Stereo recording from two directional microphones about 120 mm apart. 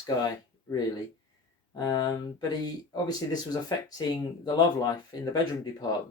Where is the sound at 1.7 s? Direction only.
30° left (ahead or behind).